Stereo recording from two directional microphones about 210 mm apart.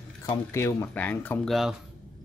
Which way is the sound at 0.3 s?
15° left (ahead or behind).